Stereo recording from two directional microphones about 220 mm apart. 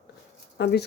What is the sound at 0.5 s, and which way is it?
Speech, 50° left (ahead or behind).